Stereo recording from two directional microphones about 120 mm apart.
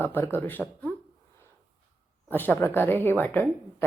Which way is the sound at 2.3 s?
15° left (ahead or behind).